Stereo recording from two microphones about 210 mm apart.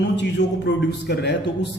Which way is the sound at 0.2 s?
55° left (ahead or behind).